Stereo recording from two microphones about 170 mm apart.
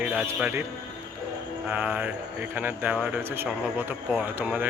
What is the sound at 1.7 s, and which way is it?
Speech, 5° right (ahead or behind).